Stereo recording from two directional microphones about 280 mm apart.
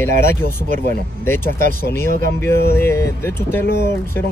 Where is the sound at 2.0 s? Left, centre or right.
Right.